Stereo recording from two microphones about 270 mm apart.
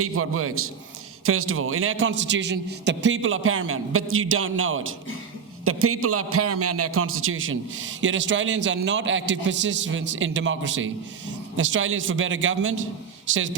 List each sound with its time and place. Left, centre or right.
0.0 s a man's voice: right